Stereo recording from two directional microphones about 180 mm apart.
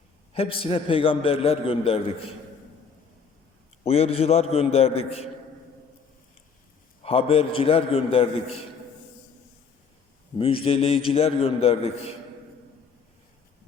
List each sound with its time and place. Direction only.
0.3 s a man's voice: 30° left (ahead or behind)
3.8 s a man's voice: 35° left (ahead or behind)
7.0 s a man's voice: 30° left (ahead or behind)
10.3 s a man's voice: 30° left (ahead or behind)